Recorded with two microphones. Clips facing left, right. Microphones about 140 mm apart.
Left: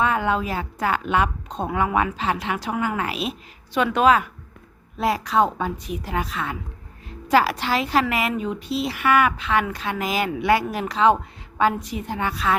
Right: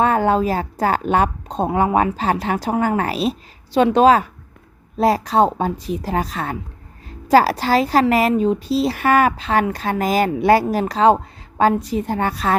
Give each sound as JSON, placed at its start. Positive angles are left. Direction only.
{"t": 0.0, "sound": "speech", "side_deg": -40}